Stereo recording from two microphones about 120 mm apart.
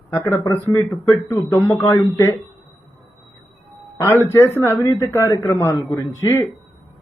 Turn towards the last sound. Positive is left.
turn(degrees=20)  # may be behind; listen again after turning